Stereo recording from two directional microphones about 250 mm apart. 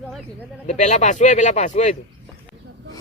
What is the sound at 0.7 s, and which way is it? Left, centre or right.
Speech, left.